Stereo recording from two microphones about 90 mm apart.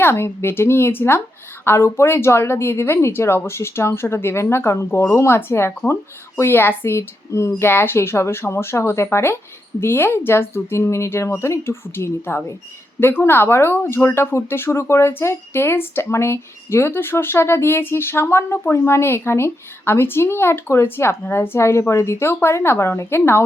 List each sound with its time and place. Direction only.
0.0 s speech: 25° left (ahead or behind)